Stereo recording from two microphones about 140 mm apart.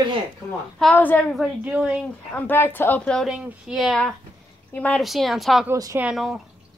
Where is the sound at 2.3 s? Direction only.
15° left (ahead or behind).